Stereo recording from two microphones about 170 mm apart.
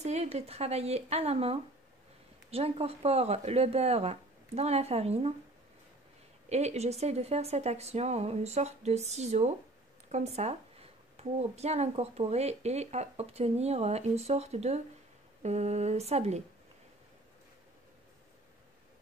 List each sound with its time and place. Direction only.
0.0 s speech: 40° right (ahead or behind)
6.5 s speech: 40° right (ahead or behind)